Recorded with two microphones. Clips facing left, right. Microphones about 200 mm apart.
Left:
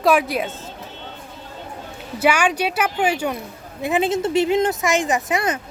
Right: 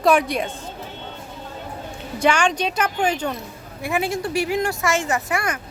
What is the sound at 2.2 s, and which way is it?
Speech, 5° left (ahead or behind).